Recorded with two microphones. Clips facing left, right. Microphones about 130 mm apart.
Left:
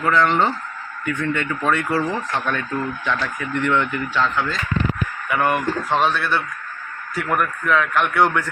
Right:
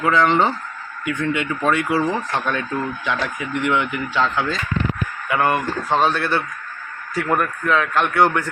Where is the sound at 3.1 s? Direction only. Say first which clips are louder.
Even; 15° right (ahead or behind).